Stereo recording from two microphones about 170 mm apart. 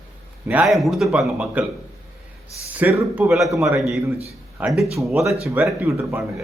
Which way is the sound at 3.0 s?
15° right (ahead or behind).